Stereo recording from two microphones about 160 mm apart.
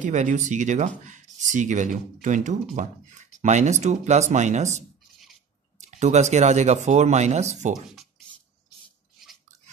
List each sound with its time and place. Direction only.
0.0 s speech: 50° right (ahead or behind)